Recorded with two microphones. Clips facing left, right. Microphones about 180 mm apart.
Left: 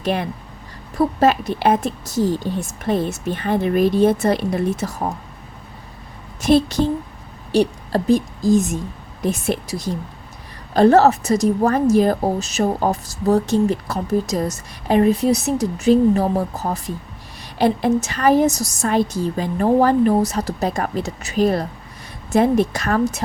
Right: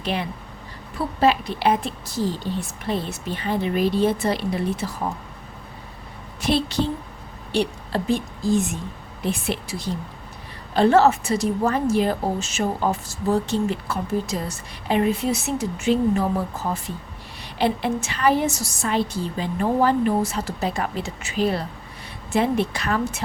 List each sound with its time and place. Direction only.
0.0 s a woman's voice: 50° left (ahead or behind)
6.4 s a woman's voice: 45° left (ahead or behind)